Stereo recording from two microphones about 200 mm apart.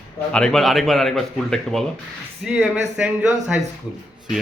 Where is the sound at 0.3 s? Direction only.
5° left (ahead or behind).